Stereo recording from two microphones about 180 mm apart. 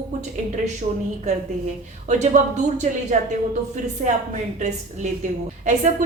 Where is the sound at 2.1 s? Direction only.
40° right (ahead or behind).